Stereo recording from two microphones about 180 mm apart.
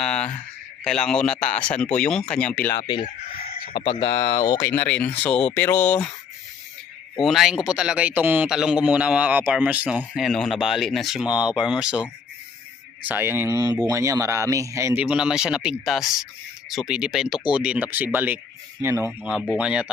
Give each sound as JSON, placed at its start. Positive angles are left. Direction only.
{"t": 0.0, "sound": "a sound", "side_deg": 5}
{"t": 0.9, "sound": "speech", "side_deg": 5}
{"t": 2.7, "sound": "speech", "side_deg": 25}
{"t": 7.2, "sound": "speech", "side_deg": 0}
{"t": 13.1, "sound": "a man's voice", "side_deg": -10}